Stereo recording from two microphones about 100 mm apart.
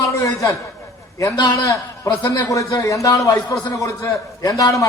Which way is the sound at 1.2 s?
40° left (ahead or behind).